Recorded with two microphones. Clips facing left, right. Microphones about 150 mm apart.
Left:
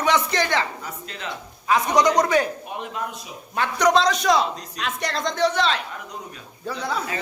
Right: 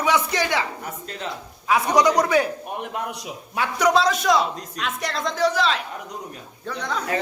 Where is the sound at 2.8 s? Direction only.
60° right (ahead or behind).